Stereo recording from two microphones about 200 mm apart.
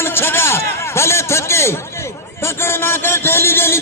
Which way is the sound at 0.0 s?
10° left (ahead or behind).